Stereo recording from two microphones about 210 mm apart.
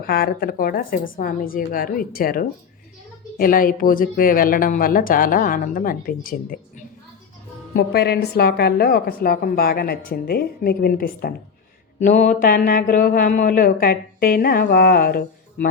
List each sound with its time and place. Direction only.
0.0 s a woman's voice: 45° left (ahead or behind)